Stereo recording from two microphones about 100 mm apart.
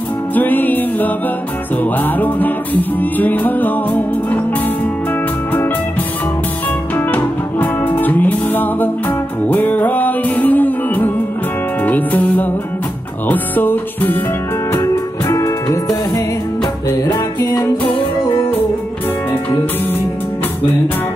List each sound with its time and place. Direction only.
0.3 s music: 20° left (ahead or behind)
7.1 s music: 20° left (ahead or behind)
14.7 s music: 35° left (ahead or behind)
17.6 s music: 45° left (ahead or behind)